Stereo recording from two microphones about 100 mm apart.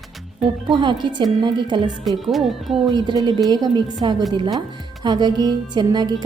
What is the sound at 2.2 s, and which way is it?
Speech, centre (ahead or behind).